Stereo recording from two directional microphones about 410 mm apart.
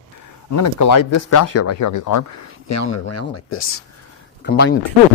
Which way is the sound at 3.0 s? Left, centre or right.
Left.